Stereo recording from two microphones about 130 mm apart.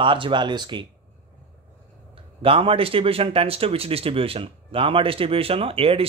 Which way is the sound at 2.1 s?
45° right (ahead or behind).